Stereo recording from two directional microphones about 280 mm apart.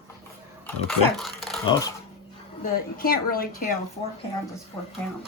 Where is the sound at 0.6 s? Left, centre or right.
Centre.